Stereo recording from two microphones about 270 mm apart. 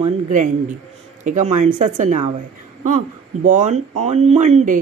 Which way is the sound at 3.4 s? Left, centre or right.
Right.